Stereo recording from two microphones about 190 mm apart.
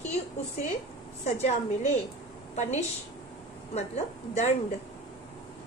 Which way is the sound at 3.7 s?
35° left (ahead or behind).